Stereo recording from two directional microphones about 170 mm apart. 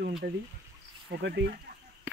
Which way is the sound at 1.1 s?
75° right (ahead or behind).